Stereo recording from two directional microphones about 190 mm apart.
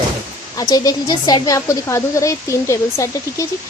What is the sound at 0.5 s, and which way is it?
A woman's voice, 20° left (ahead or behind).